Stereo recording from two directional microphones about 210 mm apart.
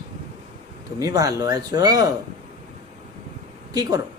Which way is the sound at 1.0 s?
15° right (ahead or behind).